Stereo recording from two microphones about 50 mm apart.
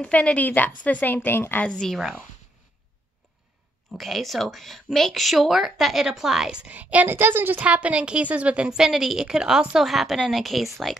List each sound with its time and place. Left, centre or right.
0.0 s a woman's voice: left
1.7 s speech: centre
4.0 s speech: centre
6.7 s a woman's voice: right
7.1 s speech: right
7.6 s a woman's voice: right; by 11.0 s centre